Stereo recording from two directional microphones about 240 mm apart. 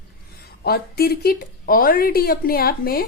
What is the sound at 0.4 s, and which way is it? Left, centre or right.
A woman's voice, left.